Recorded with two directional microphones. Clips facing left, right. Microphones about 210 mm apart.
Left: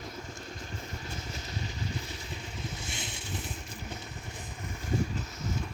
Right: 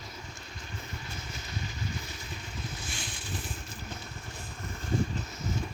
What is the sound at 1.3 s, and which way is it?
Vehicle, 35° left (ahead or behind).